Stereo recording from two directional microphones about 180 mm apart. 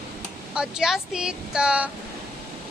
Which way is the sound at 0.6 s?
5° right (ahead or behind).